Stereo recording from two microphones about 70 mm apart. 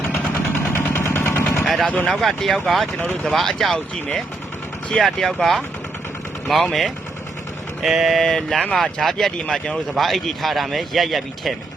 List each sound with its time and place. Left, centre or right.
0.7 s vehicle: left
1.6 s vehicle: centre
2.0 s a man's voice: centre